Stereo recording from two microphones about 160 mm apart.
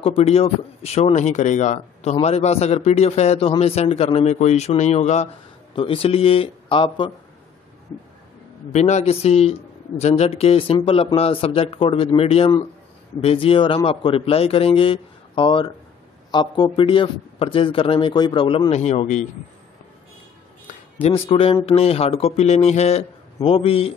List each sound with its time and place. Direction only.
0.0 s speech: 35° left (ahead or behind)
8.7 s speech: 45° left (ahead or behind)
21.0 s speech: 35° left (ahead or behind)